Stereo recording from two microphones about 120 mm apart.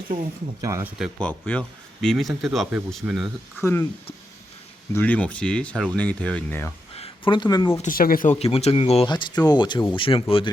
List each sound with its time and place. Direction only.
0.6 s speech: 25° right (ahead or behind)
0.9 s speech: 5° right (ahead or behind)
1.2 s speech: 10° left (ahead or behind)
3.6 s speech: 20° left (ahead or behind)
4.9 s speech: 15° left (ahead or behind)
6.9 s a sound: 55° left (ahead or behind)
7.3 s speech: 35° left (ahead or behind)
7.8 s speech: 85° left
8.4 s speech: 55° left (ahead or behind)
9.0 s speech: 35° left (ahead or behind)